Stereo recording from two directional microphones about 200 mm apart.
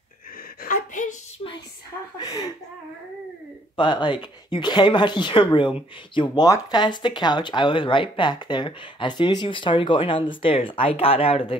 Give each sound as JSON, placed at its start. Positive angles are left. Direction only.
{"t": 0.6, "sound": "a sound", "side_deg": 40}
{"t": 2.1, "sound": "speech", "side_deg": 20}
{"t": 3.7, "sound": "speech", "side_deg": 25}